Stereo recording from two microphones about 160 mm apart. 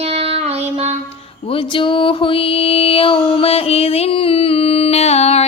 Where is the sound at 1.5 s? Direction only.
30° left (ahead or behind).